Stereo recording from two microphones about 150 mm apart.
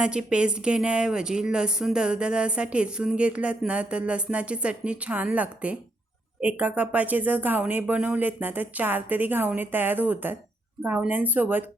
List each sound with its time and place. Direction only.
0.0 s a woman's voice: 5° right (ahead or behind)